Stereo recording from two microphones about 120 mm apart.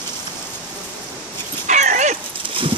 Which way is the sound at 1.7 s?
90° right.